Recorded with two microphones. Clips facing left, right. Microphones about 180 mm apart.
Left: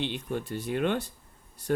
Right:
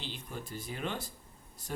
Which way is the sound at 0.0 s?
65° left (ahead or behind).